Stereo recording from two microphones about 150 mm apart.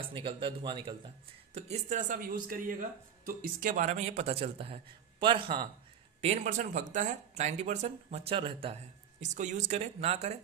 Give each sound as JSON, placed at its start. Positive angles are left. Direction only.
{"t": 0.1, "sound": "speech", "side_deg": -35}
{"t": 1.5, "sound": "speech", "side_deg": -50}
{"t": 6.2, "sound": "speech", "side_deg": -50}
{"t": 9.2, "sound": "speech", "side_deg": -55}